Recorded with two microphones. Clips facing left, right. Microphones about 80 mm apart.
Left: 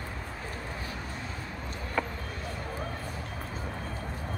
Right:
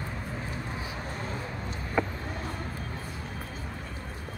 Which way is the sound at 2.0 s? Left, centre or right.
Centre.